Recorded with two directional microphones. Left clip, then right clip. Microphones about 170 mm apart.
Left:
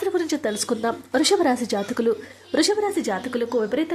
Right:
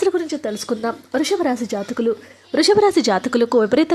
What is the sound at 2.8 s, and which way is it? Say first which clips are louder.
Speech: right 8 dB; 30° right (ahead or behind).